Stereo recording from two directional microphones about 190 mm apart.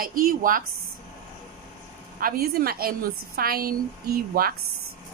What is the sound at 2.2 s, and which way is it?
A woman's voice, 50° right (ahead or behind).